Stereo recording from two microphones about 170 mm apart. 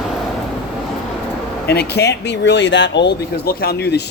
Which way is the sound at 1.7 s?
70° left (ahead or behind).